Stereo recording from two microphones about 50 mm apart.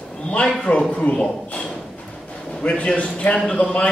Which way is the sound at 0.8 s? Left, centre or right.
Centre.